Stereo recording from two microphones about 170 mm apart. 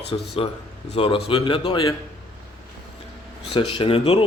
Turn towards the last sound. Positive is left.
turn(degrees=35)  # may be behind; listen again after turning